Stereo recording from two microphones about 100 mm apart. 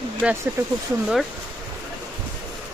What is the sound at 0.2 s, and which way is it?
Speech, 10° right (ahead or behind).